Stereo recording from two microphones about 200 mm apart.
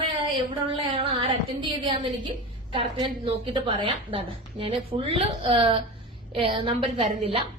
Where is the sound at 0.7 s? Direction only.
25° right (ahead or behind).